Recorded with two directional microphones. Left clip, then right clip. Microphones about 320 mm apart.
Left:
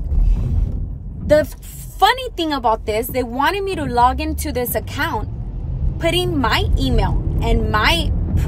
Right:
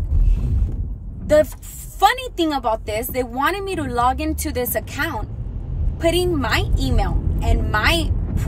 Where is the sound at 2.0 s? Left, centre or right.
Centre.